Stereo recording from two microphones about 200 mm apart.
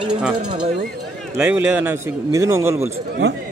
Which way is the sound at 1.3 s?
5° right (ahead or behind).